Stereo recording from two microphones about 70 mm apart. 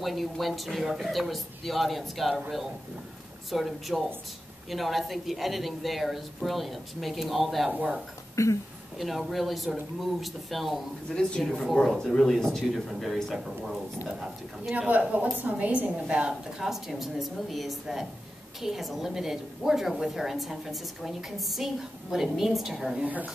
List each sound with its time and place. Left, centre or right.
0.0 s a woman's voice: centre
3.4 s a woman's voice: centre
8.4 s speech: left
8.9 s a woman's voice: centre
11.1 s a woman's voice: centre
14.6 s a woman's voice: centre
23.0 s a woman's voice: right